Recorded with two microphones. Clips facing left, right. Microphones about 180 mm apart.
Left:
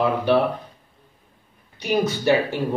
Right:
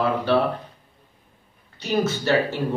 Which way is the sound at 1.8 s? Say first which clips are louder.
Left 2 dB; 15° left (ahead or behind).